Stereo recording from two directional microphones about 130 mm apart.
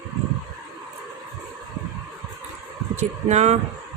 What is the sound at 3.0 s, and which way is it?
Speech, 60° right (ahead or behind).